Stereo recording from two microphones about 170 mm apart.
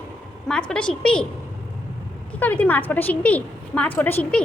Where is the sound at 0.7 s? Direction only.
5° left (ahead or behind).